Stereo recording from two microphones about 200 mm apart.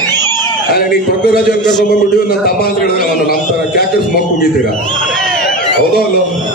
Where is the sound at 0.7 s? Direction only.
50° left (ahead or behind).